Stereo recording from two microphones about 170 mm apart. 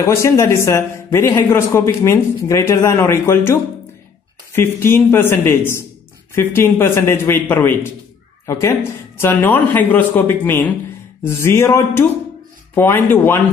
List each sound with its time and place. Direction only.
0.0 s speech: 15° left (ahead or behind)
4.6 s speech: 15° left (ahead or behind)